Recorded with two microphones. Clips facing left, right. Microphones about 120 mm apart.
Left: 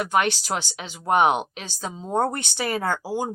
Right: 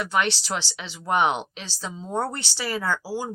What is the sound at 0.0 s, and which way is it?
Speech, 50° left (ahead or behind).